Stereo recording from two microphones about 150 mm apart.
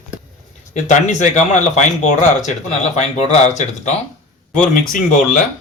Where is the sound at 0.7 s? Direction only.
55° left (ahead or behind).